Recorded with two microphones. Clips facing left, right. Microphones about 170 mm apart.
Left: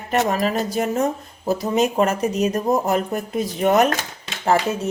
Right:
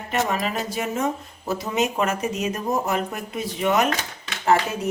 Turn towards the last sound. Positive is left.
turn(degrees=25)  # may be behind; listen again after turning